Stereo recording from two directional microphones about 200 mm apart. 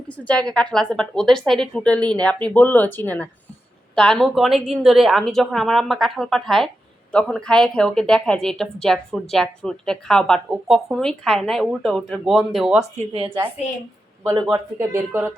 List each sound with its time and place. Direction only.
0.1 s a woman's voice: 5° left (ahead or behind)
13.0 s a woman's voice: 30° right (ahead or behind)
14.5 s speech: 15° right (ahead or behind)